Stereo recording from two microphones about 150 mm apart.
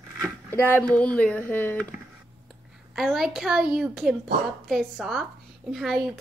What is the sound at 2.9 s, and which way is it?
A woman's voice, centre (ahead or behind).